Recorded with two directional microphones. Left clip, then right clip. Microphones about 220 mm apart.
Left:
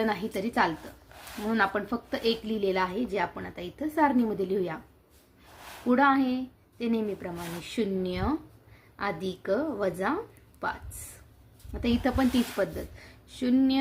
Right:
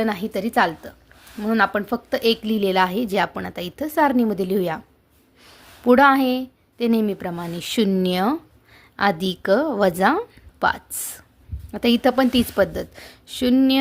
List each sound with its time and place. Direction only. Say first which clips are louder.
0.0 s a woman's voice: right 6 dB; 40° right (ahead or behind)
5.9 s a woman's voice: right 9 dB; 45° right (ahead or behind)